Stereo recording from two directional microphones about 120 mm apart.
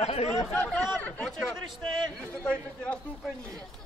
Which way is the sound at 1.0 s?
10° left (ahead or behind).